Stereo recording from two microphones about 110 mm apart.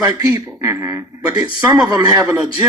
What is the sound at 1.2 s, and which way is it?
Speech, 35° right (ahead or behind).